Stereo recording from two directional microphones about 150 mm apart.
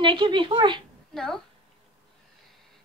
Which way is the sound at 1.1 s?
5° left (ahead or behind).